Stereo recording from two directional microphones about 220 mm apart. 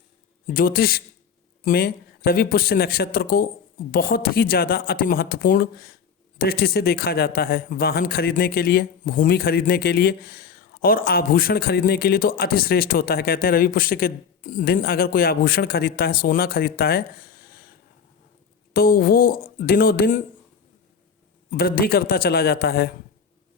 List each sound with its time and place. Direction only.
0.4 s speech: 40° left (ahead or behind)
18.7 s speech: 45° left (ahead or behind)
21.5 s speech: 40° left (ahead or behind)